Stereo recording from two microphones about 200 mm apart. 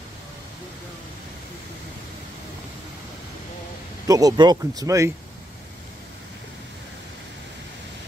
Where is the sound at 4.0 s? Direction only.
20° right (ahead or behind).